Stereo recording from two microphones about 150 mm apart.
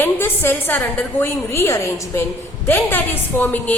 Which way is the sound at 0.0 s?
15° left (ahead or behind).